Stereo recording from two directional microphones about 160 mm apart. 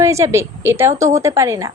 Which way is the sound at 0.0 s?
20° right (ahead or behind).